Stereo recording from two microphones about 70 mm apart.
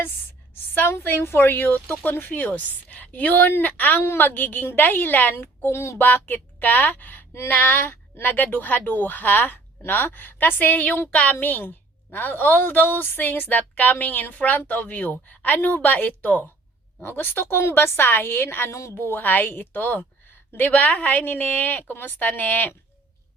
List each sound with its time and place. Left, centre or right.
0.7 s a woman's voice: left
6.0 s a woman's voice: left
18.7 s a woman's voice: left
18.9 s a woman's voice: left